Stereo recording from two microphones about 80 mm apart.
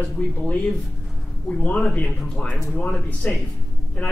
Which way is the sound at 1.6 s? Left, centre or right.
Centre.